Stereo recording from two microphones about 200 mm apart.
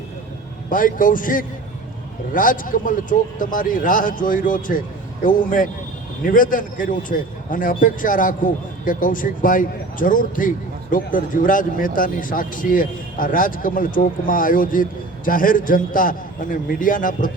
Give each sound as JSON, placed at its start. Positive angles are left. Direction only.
{"t": 0.7, "sound": "speech", "side_deg": 45}